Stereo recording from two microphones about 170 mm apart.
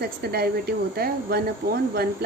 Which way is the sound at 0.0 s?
65° right (ahead or behind).